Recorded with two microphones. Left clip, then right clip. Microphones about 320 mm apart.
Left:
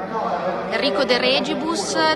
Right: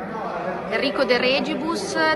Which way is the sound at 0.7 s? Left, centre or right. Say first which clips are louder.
Even; centre.